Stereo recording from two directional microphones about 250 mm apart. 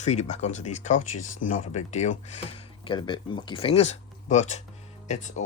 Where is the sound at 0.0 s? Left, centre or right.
Left.